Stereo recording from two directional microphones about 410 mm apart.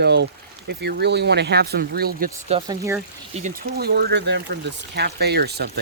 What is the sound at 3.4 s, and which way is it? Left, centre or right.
Speech, right.